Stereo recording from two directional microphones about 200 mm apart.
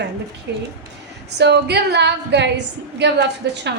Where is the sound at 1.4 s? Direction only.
60° right (ahead or behind).